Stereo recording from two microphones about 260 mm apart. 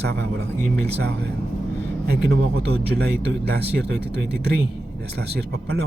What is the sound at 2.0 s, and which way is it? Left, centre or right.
Speech, right.